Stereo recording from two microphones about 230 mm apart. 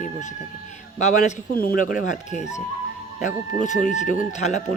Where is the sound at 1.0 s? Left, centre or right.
Left.